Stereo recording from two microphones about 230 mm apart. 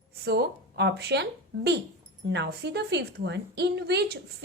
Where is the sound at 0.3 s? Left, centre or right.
Right.